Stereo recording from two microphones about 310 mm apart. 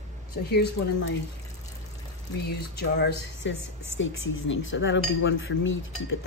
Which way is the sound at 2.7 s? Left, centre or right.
Left.